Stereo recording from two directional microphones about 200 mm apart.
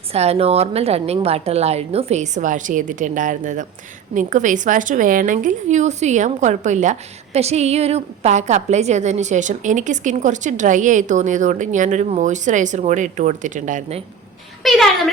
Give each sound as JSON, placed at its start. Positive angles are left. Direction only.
{"t": 0.1, "sound": "a woman's voice", "side_deg": -30}
{"t": 14.6, "sound": "a woman's voice", "side_deg": 0}